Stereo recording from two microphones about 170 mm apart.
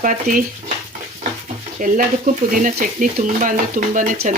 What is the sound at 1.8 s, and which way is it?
Speech, 55° right (ahead or behind).